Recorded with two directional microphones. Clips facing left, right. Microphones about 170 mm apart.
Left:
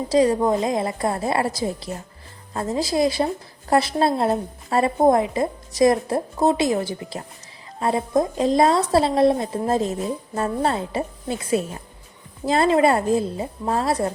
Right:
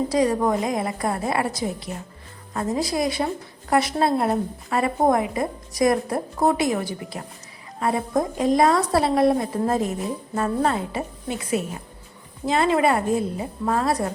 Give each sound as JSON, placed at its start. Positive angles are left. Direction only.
{"t": 0.1, "sound": "a woman's voice", "side_deg": 25}